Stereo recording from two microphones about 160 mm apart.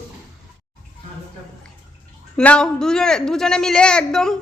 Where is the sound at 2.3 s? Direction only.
5° left (ahead or behind).